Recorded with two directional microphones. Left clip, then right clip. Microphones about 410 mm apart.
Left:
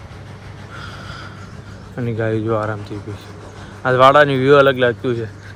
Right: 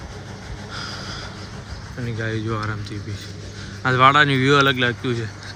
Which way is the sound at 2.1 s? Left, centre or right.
Left.